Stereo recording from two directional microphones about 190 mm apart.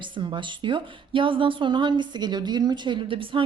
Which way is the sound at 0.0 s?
25° right (ahead or behind).